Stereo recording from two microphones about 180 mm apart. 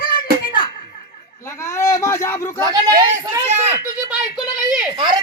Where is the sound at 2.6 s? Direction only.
20° right (ahead or behind).